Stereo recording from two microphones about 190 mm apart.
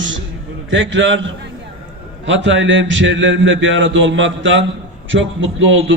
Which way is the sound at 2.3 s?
75° right (ahead or behind).